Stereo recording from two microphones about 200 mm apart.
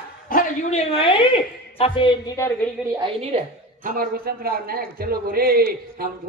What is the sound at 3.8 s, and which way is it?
A man's voice, 45° right (ahead or behind).